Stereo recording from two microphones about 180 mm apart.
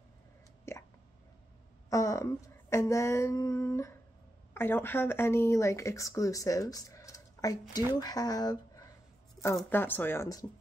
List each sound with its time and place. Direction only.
0.7 s hiccup: 15° left (ahead or behind)
1.9 s speech: 15° left (ahead or behind)
9.7 s speech: 10° left (ahead or behind)